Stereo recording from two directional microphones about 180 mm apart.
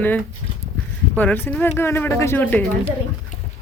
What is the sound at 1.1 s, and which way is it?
Speech, 10° left (ahead or behind).